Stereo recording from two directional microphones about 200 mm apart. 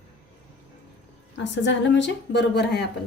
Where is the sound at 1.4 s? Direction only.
65° left (ahead or behind).